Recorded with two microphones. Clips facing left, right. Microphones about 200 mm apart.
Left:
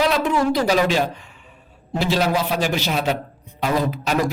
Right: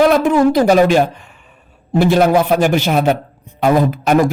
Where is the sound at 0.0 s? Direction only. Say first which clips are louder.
Right 8 dB; 50° right (ahead or behind).